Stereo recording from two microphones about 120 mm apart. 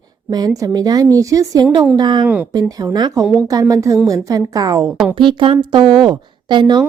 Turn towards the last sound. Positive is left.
turn(degrees=-40)  # may be behind; listen again after turning